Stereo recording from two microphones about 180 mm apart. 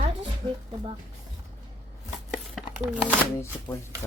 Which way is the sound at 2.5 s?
5° right (ahead or behind).